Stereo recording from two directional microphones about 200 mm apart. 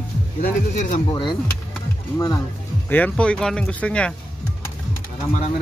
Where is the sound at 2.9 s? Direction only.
10° left (ahead or behind).